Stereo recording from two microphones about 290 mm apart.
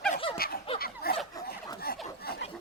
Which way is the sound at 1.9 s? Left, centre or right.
Left.